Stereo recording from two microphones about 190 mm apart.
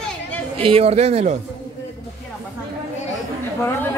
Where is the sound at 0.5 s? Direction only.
30° right (ahead or behind).